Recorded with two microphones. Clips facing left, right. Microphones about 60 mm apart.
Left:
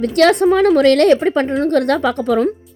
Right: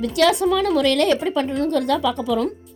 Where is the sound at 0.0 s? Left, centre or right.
Left.